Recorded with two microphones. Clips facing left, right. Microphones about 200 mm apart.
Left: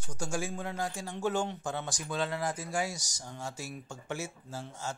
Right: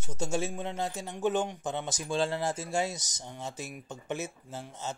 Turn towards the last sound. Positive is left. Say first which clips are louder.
# right 1 dB
turn(degrees=-20)  # may be behind; listen again after turning